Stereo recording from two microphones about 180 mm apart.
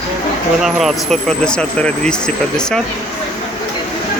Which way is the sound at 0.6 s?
Centre (ahead or behind).